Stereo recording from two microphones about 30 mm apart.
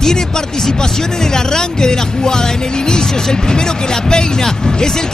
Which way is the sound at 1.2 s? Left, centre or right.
Centre.